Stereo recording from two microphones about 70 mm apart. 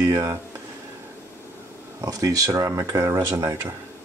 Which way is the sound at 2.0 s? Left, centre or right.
Right.